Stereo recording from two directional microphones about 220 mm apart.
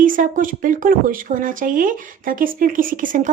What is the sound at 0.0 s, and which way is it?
Speech, 35° right (ahead or behind).